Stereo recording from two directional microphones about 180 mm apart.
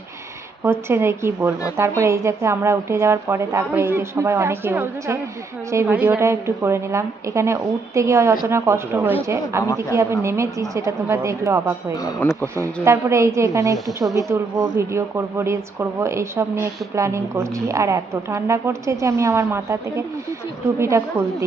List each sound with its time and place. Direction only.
0.7 s a woman's voice: 15° right (ahead or behind)
12.8 s a woman's voice: 15° right (ahead or behind)